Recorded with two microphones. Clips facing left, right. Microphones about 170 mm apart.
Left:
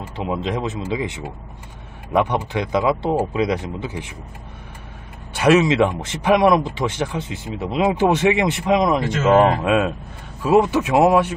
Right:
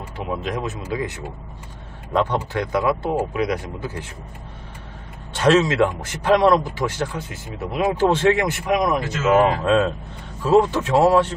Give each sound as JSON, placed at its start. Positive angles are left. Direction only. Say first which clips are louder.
{"t": 0.2, "sound": "speech", "louder": "left 3 dB", "side_deg": 25}
{"t": 5.3, "sound": "speech", "louder": "left 2 dB", "side_deg": 10}
{"t": 9.6, "sound": "speech", "louder": "even", "side_deg": 10}